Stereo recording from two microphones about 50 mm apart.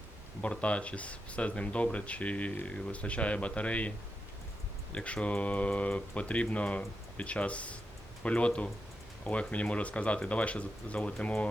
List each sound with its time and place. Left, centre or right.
0.4 s speech: left